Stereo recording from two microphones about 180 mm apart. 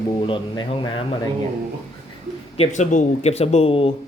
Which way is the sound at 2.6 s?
40° left (ahead or behind).